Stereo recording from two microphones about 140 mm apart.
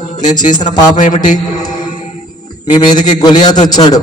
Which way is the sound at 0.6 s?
30° left (ahead or behind).